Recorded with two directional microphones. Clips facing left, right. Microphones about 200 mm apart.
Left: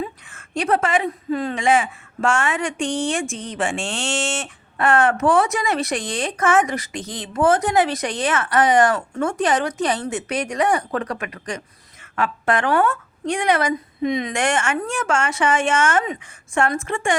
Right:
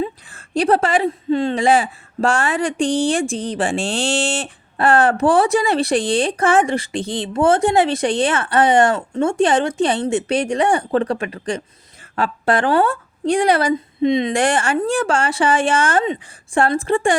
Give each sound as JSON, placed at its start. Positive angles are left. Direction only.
{"t": 0.0, "sound": "a woman's voice", "side_deg": -35}